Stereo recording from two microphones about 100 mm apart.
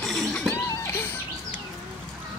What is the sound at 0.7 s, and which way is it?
Music, 25° left (ahead or behind).